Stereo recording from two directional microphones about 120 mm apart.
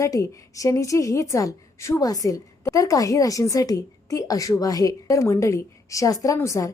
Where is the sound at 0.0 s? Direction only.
30° left (ahead or behind).